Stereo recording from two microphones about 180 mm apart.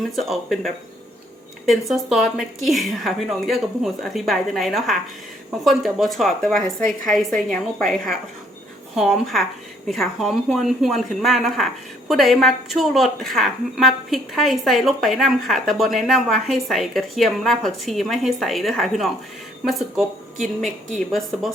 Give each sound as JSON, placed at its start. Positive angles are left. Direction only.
{"t": 0.2, "sound": "a woman's voice", "side_deg": 0}
{"t": 21.1, "sound": "a woman's voice", "side_deg": 0}